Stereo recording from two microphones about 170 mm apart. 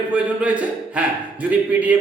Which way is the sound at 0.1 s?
5° right (ahead or behind).